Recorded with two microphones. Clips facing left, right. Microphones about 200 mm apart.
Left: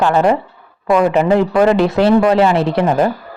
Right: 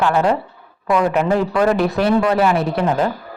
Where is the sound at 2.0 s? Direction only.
25° left (ahead or behind).